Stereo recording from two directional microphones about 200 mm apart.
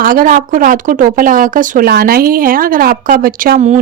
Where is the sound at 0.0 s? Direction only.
45° right (ahead or behind).